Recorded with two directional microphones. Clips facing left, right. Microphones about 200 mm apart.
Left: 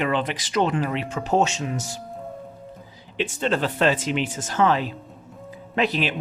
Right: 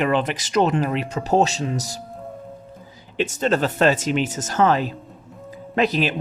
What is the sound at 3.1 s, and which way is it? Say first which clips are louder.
Speech: right 3 dB; 40° right (ahead or behind).